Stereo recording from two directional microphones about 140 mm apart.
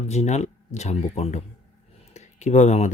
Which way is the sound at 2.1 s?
55° left (ahead or behind).